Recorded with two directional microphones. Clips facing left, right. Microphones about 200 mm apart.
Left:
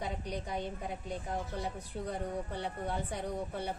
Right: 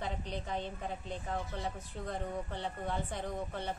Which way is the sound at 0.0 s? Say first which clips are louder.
Left 1 dB; 10° left (ahead or behind).